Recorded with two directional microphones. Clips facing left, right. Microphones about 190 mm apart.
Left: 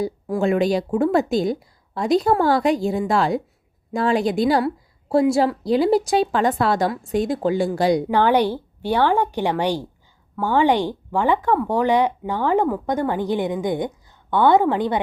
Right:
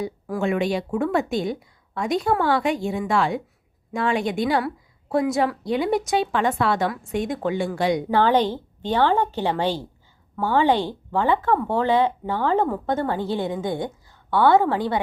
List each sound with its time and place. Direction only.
0.0 s a woman's voice: 35° left (ahead or behind)
8.1 s speech: 15° left (ahead or behind)